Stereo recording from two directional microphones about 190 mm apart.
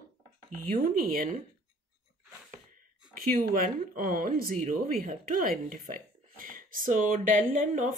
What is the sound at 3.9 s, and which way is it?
Speech, 45° right (ahead or behind).